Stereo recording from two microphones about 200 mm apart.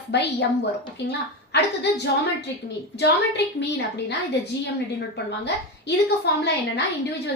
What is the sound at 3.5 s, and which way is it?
Speech, 60° left (ahead or behind).